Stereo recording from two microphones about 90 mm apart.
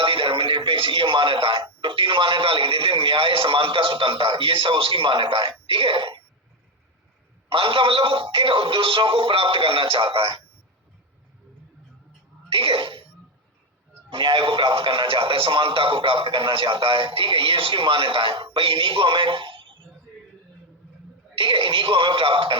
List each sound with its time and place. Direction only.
0.0 s speech: 75° right (ahead or behind)
7.5 s speech: 75° right (ahead or behind)
12.5 s speech: 75° right (ahead or behind)
14.1 s speech: 75° right (ahead or behind)
21.3 s speech: 80° right